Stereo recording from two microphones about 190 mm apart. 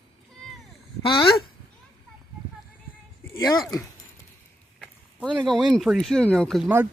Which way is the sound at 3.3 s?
20° left (ahead or behind).